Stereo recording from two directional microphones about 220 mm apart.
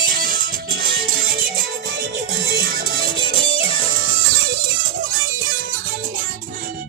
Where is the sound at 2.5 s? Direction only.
45° right (ahead or behind).